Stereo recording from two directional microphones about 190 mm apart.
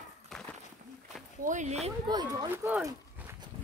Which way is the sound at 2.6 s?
10° right (ahead or behind).